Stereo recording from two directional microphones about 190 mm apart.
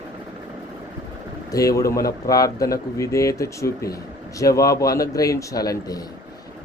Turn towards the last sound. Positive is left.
turn(degrees=20)  # may be behind; listen again after turning